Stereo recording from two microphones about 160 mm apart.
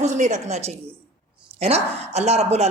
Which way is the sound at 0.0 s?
45° right (ahead or behind).